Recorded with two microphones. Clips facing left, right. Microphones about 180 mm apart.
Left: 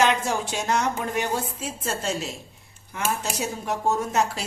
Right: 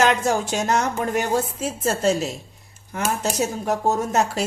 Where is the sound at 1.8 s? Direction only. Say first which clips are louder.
Right 8 dB; 40° right (ahead or behind).